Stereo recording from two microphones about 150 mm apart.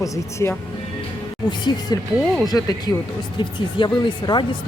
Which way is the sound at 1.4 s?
30° left (ahead or behind).